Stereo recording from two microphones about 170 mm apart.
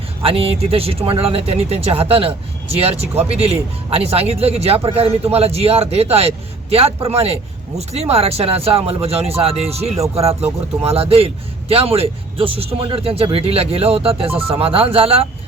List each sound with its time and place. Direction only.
0.2 s speech: 35° right (ahead or behind)